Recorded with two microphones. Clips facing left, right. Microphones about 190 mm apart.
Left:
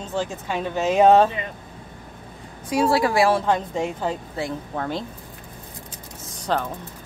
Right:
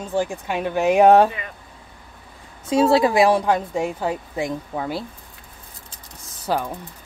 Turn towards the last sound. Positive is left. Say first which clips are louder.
# right 1 dB
turn(degrees=-10)  # may be behind; listen again after turning